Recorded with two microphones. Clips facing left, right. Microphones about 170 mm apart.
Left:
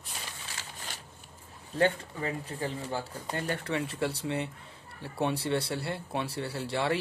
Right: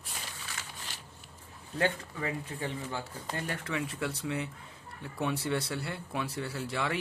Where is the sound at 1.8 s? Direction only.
30° left (ahead or behind).